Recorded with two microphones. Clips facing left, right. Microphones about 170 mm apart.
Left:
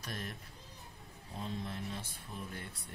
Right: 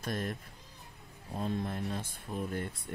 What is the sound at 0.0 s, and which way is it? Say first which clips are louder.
Speech: right 8 dB; 50° right (ahead or behind).